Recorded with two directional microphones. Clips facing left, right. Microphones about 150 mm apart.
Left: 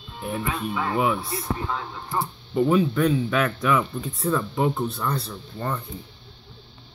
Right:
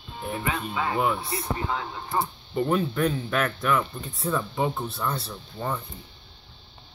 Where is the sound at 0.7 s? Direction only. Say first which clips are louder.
Left 2 dB; 10° right (ahead or behind).